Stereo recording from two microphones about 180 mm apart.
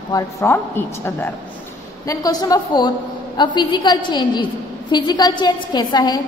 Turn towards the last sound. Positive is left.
turn(degrees=25)  # may be behind; listen again after turning